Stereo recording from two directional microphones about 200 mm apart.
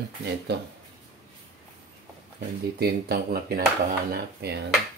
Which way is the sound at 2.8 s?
50° right (ahead or behind).